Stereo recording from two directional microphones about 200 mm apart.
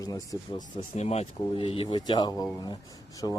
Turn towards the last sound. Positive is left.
turn(degrees=20)  # may be behind; listen again after turning